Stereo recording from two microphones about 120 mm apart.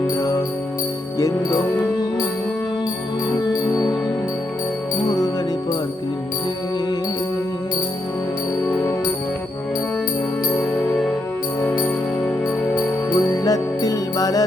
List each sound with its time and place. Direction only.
0.2 s music: 30° left (ahead or behind)
3.4 s music: 30° left (ahead or behind)
5.0 s music: 30° left (ahead or behind)
10.6 s music: centre (ahead or behind)
12.7 s music: 35° left (ahead or behind)